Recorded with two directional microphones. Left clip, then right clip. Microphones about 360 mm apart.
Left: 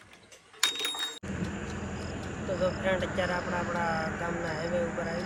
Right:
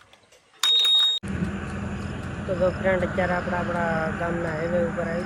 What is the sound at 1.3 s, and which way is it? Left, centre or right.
Vehicle, centre.